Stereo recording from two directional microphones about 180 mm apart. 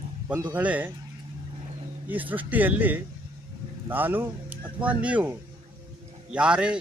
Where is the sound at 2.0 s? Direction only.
10° right (ahead or behind).